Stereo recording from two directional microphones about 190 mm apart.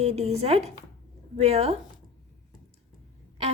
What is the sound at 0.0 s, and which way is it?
A woman's voice, 35° right (ahead or behind).